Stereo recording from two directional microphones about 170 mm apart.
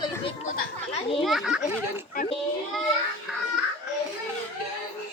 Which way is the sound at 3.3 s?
5° right (ahead or behind).